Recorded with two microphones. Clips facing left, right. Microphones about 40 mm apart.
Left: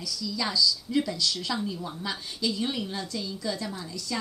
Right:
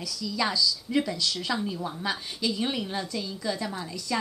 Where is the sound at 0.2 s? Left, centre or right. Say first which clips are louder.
Right 1 dB; centre.